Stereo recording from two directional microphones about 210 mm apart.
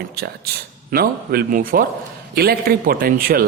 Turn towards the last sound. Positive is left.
turn(degrees=-45)  # may be behind; listen again after turning